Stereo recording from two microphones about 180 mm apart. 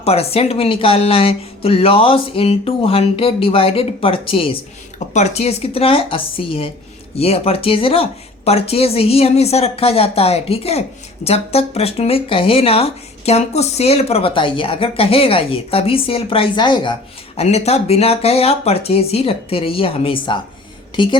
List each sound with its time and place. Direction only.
0.0 s a woman's voice: 35° left (ahead or behind)